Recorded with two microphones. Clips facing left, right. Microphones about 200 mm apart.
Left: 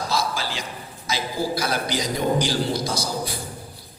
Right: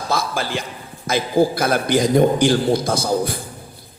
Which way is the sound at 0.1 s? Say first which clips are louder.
Right 7 dB; 55° right (ahead or behind).